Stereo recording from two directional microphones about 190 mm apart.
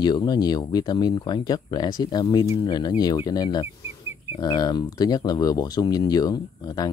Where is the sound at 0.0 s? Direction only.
20° left (ahead or behind).